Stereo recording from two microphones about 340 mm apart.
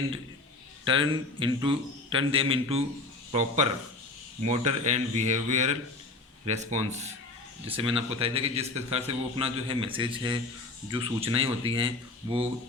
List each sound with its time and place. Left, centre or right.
0.9 s a man's voice: centre